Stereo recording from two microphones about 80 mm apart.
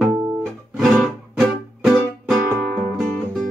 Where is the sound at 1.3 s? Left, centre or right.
Centre.